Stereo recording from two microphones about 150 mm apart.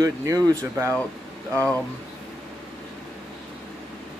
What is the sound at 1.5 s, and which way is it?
Speech, 10° left (ahead or behind).